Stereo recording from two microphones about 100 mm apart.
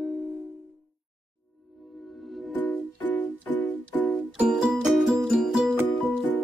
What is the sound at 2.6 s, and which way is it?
Music, 15° left (ahead or behind).